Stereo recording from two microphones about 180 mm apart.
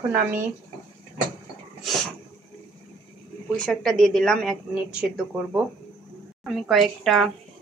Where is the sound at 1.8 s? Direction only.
Centre (ahead or behind).